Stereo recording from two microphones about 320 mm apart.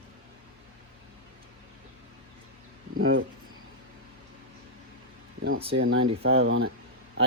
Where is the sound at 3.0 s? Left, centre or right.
Right.